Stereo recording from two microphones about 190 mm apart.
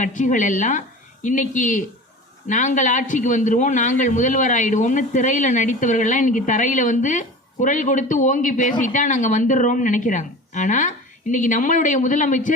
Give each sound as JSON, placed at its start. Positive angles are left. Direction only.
{"t": 0.0, "sound": "a woman's voice", "side_deg": 40}